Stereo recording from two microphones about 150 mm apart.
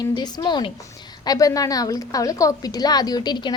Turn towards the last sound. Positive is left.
turn(degrees=30)  # may be behind; listen again after turning